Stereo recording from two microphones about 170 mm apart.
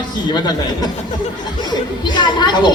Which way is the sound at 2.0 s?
25° left (ahead or behind).